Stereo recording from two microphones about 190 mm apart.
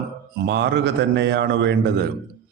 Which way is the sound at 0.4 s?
65° right (ahead or behind).